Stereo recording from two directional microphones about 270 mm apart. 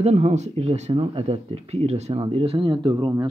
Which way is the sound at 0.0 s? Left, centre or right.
Right.